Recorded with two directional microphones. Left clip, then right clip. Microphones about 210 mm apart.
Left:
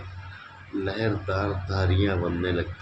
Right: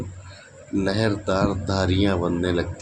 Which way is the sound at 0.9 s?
30° right (ahead or behind).